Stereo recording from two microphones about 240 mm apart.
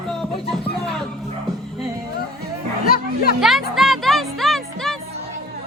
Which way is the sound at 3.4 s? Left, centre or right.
Centre.